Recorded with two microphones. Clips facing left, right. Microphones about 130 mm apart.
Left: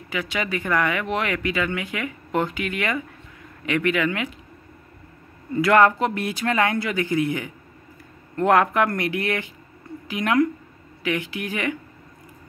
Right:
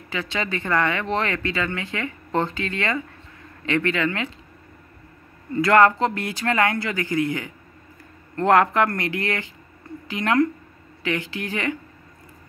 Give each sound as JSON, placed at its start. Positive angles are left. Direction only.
{"t": 0.1, "sound": "speech", "side_deg": 10}
{"t": 5.6, "sound": "a woman's voice", "side_deg": 15}